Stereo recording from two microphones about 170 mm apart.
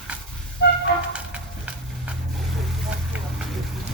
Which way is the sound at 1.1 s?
5° right (ahead or behind).